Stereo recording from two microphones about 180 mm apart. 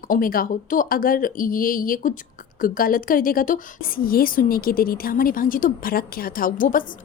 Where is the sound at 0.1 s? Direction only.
50° left (ahead or behind).